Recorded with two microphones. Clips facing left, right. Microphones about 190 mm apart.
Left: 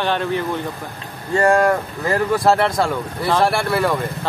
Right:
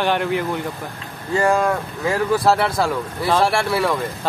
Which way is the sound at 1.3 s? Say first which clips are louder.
Left 3 dB; centre (ahead or behind).